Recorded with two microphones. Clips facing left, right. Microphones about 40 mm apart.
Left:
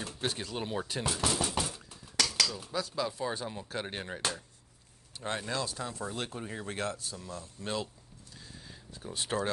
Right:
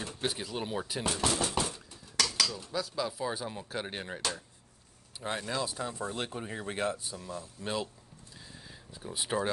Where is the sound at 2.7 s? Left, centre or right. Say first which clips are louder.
Even; centre.